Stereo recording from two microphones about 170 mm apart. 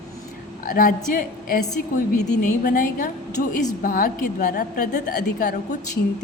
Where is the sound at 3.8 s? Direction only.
55° left (ahead or behind).